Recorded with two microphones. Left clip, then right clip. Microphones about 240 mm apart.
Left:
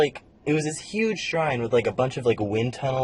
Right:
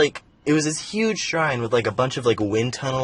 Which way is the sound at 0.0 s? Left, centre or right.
Right.